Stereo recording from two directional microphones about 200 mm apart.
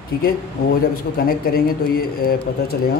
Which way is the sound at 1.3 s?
50° left (ahead or behind).